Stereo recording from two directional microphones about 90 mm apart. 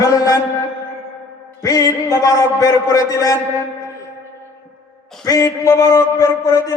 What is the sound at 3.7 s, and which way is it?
Music, 35° left (ahead or behind).